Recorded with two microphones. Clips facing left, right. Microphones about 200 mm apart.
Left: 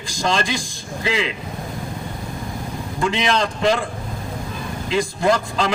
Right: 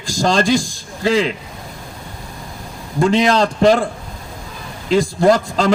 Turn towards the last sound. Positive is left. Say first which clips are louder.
# right 5 dB
turn(degrees=-40)  # may be behind; listen again after turning